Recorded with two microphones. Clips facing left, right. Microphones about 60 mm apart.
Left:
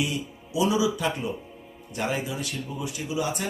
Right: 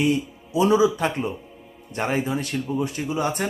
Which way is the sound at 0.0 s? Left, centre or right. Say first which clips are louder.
Right 7 dB; right.